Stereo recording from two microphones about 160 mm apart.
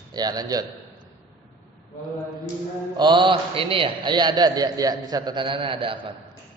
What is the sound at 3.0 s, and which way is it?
A man's voice, 30° right (ahead or behind).